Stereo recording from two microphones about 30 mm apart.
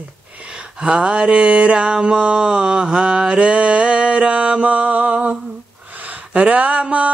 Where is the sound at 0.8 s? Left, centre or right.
Right.